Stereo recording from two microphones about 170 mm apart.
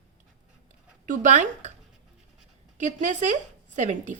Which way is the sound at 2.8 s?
45° right (ahead or behind).